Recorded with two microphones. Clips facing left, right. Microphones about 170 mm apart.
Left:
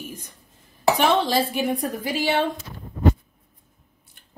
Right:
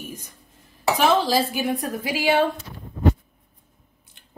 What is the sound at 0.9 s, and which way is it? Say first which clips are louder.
Speech: right 3 dB; centre (ahead or behind).